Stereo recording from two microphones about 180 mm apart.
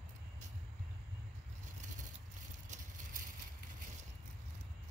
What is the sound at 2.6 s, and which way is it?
Vehicle, 40° right (ahead or behind).